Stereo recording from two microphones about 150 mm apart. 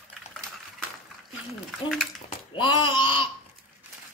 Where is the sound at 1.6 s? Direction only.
Centre (ahead or behind).